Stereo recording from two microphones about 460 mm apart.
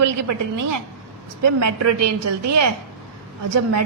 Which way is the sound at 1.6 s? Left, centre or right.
Right.